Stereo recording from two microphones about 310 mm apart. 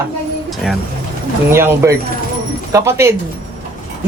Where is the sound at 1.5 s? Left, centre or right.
Centre.